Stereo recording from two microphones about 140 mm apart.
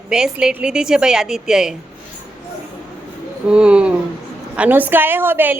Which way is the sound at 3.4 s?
5° right (ahead or behind).